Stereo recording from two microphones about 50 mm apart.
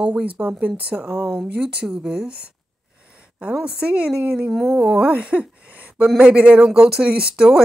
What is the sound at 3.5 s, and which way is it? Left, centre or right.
Speech, centre.